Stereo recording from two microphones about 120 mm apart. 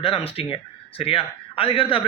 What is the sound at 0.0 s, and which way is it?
A man's voice, 50° left (ahead or behind).